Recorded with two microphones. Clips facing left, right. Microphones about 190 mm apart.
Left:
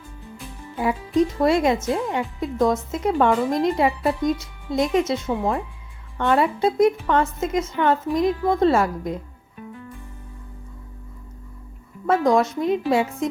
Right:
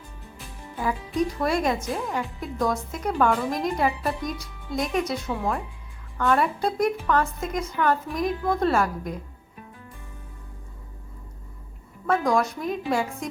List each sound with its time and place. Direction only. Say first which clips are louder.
0.8 s a woman's voice: left 5 dB; 25° left (ahead or behind)
12.0 s a woman's voice: left 4 dB; 25° left (ahead or behind)